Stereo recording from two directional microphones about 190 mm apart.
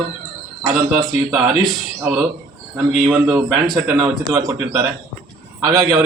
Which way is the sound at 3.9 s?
15° right (ahead or behind).